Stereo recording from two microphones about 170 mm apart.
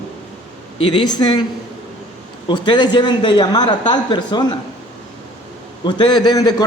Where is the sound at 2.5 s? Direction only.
25° left (ahead or behind).